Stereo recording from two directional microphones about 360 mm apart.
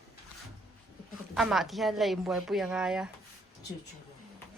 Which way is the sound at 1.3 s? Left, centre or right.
Centre.